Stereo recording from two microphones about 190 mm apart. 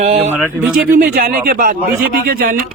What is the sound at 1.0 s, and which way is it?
Speech, 50° right (ahead or behind).